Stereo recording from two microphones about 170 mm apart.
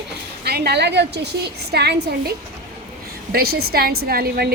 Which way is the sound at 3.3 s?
65° right (ahead or behind).